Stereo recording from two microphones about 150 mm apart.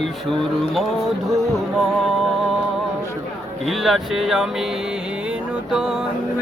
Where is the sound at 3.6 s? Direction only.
Centre (ahead or behind).